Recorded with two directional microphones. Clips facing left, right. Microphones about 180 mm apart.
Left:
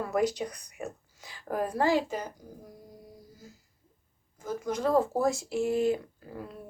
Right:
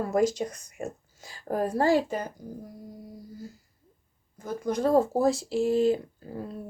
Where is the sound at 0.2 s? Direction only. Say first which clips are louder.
Right 3 dB; 45° right (ahead or behind).